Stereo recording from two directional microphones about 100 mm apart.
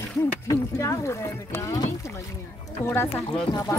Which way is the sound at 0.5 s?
30° left (ahead or behind).